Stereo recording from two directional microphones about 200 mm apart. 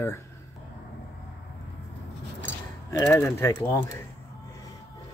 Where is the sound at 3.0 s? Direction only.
10° left (ahead or behind).